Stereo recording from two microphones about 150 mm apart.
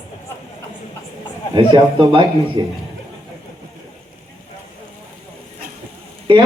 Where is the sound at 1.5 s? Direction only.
30° right (ahead or behind).